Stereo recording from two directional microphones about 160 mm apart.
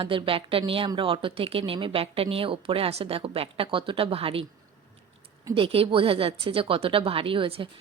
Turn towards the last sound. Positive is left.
turn(degrees=-35)  # may be behind; listen again after turning